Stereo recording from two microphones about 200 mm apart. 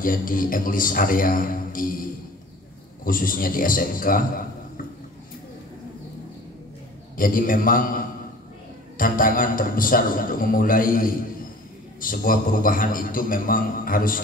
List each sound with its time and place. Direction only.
0.0 s a man's voice: 45° left (ahead or behind)
3.1 s a man's voice: 45° left (ahead or behind)
7.2 s a man's voice: 45° left (ahead or behind)